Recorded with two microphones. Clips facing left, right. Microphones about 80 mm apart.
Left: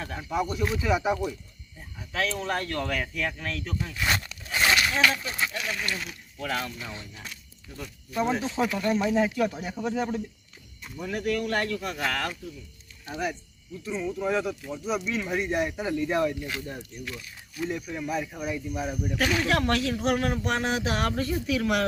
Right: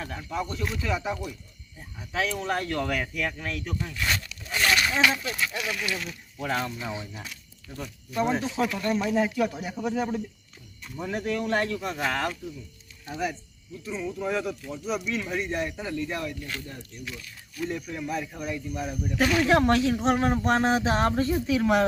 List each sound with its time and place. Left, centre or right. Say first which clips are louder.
0.2 s speech: left 5 dB; centre
1.8 s speech: right 1 dB; centre
3.5 s speech: right 1 dB; centre
3.8 s speech: left 1 dB; centre
4.1 s a sound: left 3 dB; left
4.6 s a sound: even; centre
4.9 s speech: even; centre
5.5 s speech: right 1 dB; centre
6.7 s speech: right 5 dB; centre
7.8 s speech: right 1 dB; centre
10.9 s speech: left 1 dB; right
13.1 s speech: even; centre; by 16.5 s left
17.2 s speech: right 1 dB; centre
19.5 s speech: right 4 dB; right